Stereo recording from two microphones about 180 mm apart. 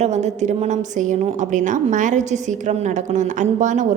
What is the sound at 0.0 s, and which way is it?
A woman's voice, 40° right (ahead or behind).